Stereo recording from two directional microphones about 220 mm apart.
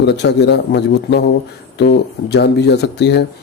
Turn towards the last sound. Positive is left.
turn(degrees=50)  # may be behind; listen again after turning